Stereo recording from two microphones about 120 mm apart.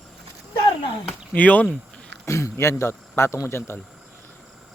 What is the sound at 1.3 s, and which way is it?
Speech, 10° left (ahead or behind).